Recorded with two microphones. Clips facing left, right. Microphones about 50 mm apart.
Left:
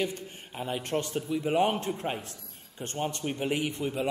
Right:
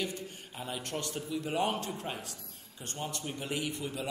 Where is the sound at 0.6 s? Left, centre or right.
Left.